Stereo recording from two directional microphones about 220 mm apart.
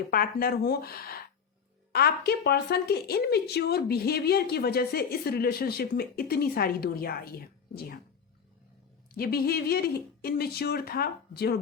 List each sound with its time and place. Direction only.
0.1 s a woman's voice: 40° left (ahead or behind)
9.1 s a woman's voice: 45° left (ahead or behind)